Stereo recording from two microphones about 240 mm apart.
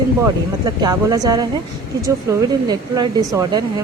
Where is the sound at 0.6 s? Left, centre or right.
Centre.